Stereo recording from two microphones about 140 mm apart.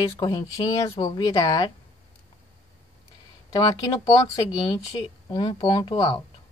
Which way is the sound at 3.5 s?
30° left (ahead or behind).